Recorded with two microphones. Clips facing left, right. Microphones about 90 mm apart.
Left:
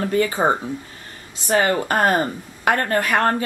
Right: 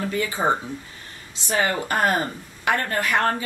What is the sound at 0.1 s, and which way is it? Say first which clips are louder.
A woman's voice: left 4 dB; 45° left (ahead or behind).